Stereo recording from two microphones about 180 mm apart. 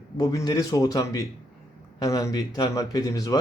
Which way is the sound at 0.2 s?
20° left (ahead or behind).